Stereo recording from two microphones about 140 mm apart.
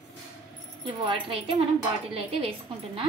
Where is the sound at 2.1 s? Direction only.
40° right (ahead or behind).